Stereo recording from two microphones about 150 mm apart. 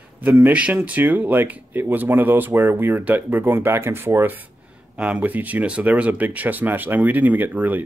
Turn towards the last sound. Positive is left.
turn(degrees=-10)  # may be behind; listen again after turning